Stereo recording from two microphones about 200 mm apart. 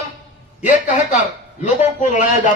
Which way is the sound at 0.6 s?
40° left (ahead or behind).